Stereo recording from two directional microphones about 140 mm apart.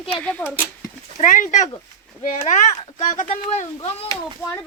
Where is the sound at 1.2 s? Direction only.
65° left (ahead or behind).